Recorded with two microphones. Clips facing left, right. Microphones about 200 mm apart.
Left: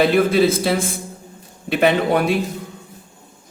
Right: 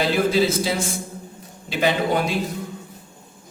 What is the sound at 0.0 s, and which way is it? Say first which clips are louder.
A man's voice: left 4 dB; 60° left (ahead or behind).